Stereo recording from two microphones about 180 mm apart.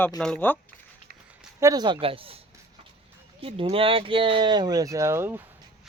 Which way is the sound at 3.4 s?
30° right (ahead or behind).